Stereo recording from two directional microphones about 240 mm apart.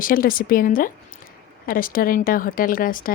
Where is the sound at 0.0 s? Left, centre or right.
Left.